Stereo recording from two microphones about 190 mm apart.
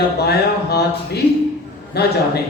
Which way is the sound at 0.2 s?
60° left (ahead or behind).